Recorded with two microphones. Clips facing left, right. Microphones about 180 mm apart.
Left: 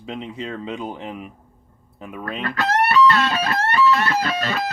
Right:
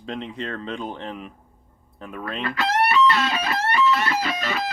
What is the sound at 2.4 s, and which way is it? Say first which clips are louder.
Music: left 2 dB; 45° left (ahead or behind).